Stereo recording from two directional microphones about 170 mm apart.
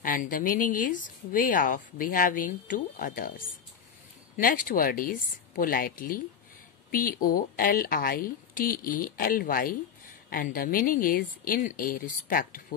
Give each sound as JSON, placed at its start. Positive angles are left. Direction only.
{"t": 0.0, "sound": "a woman's voice", "side_deg": 50}